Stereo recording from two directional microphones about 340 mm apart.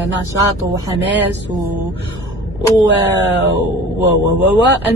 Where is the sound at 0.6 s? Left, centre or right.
Centre.